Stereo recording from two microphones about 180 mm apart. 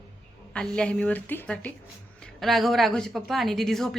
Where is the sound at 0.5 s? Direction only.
5° left (ahead or behind).